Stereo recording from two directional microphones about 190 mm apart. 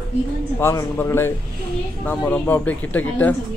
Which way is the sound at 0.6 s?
15° left (ahead or behind).